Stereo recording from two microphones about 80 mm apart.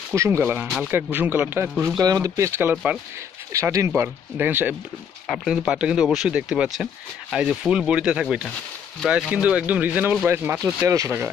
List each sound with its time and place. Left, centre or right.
0.1 s speech: right
0.4 s speech: right
2.0 s speech: right
3.5 s speech: right
5.5 s speech: centre; by 10.6 s right
10.6 s speech: right